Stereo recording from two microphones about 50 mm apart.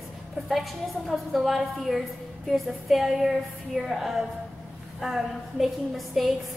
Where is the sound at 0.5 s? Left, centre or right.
Centre.